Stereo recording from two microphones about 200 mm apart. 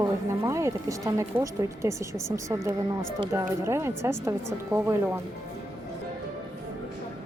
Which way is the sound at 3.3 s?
15° right (ahead or behind).